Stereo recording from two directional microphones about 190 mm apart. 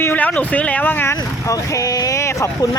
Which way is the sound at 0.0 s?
10° left (ahead or behind).